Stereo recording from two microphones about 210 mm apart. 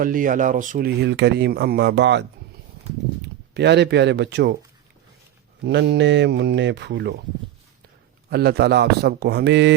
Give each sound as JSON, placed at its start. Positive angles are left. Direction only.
{"t": 0.0, "sound": "speech", "side_deg": -40}
{"t": 0.9, "sound": "speech", "side_deg": -55}
{"t": 3.5, "sound": "speech", "side_deg": -55}
{"t": 5.6, "sound": "speech", "side_deg": -55}
{"t": 8.3, "sound": "speech", "side_deg": -50}